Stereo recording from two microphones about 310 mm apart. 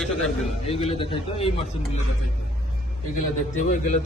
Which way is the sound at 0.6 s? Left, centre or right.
Centre.